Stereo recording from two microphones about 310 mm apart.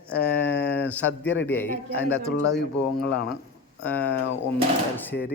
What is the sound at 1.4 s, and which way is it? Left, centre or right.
Speech, centre.